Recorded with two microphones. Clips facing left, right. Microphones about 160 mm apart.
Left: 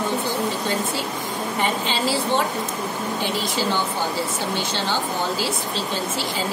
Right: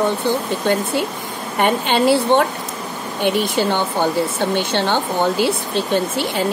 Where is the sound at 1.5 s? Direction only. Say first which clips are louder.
Right 9 dB; 60° right (ahead or behind).